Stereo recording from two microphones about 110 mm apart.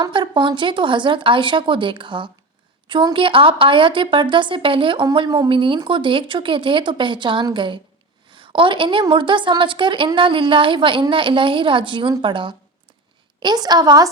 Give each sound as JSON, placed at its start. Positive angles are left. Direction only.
{"t": 0.0, "sound": "a woman's voice", "side_deg": -45}